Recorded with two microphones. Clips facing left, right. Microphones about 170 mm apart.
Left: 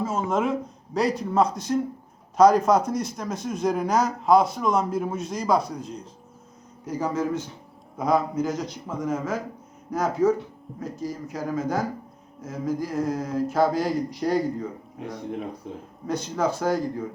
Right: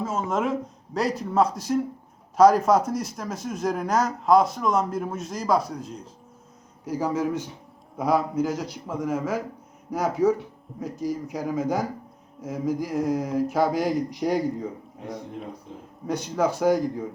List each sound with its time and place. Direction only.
0.0 s a man's voice: centre (ahead or behind)
16.0 s speech: 15° right (ahead or behind)